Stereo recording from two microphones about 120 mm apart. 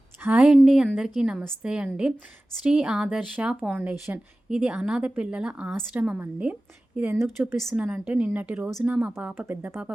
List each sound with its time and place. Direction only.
0.2 s speech: 10° right (ahead or behind)
7.3 s speech: 5° right (ahead or behind)